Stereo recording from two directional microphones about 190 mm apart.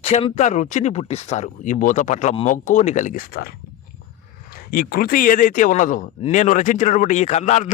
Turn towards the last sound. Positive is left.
turn(degrees=40)  # may be behind; listen again after turning